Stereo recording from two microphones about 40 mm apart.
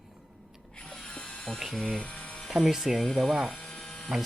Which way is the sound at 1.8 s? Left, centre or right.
Centre.